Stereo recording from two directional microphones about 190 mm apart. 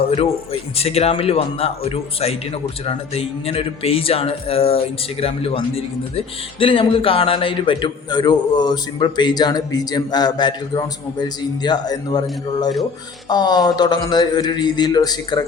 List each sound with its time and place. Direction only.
0.1 s speech: 30° left (ahead or behind)